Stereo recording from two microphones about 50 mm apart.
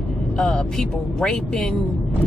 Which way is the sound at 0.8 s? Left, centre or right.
Centre.